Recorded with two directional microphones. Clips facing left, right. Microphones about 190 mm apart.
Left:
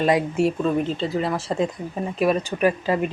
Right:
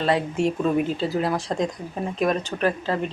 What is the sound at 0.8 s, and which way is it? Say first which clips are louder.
Speech: even; 5° right (ahead or behind).